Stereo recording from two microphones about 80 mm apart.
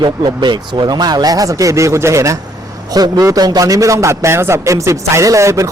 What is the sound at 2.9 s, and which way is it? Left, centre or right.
A man's voice, right.